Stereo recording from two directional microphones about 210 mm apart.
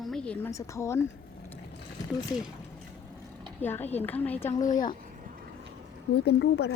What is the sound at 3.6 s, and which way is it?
Speech, 10° left (ahead or behind).